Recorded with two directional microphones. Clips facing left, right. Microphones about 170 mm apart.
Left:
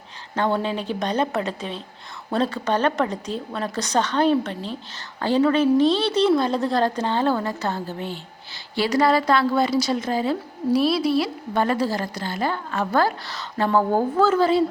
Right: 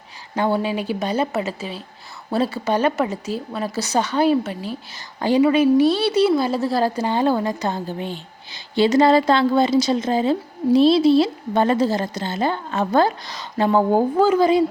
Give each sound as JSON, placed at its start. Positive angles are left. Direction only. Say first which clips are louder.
{"t": 0.3, "sound": "a woman's voice", "louder": "right 2 dB", "side_deg": -10}